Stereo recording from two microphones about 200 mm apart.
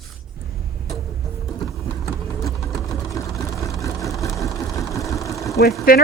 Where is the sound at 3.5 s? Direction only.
15° left (ahead or behind).